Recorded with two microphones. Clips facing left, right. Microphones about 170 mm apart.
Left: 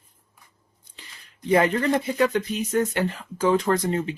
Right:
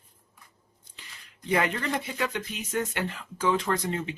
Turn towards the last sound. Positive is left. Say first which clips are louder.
# left 6 dB
turn(degrees=40)  # may be behind; listen again after turning